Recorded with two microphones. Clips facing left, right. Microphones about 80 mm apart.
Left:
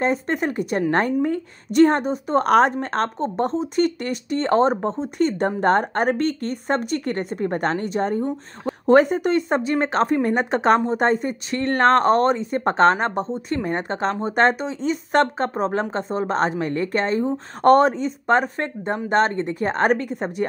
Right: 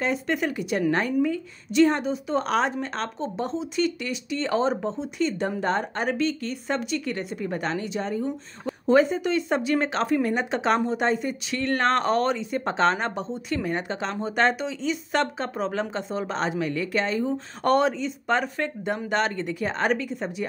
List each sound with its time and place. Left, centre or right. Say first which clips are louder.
0.0 s a woman's voice: left 4 dB; left